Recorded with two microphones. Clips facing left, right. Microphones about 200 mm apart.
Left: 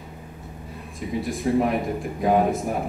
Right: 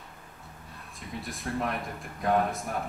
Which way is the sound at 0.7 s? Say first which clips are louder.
Left 11 dB; centre (ahead or behind).